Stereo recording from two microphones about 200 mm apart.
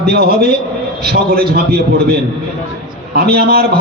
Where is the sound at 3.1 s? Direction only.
50° right (ahead or behind).